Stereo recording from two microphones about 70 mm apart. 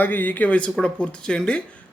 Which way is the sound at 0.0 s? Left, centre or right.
Left.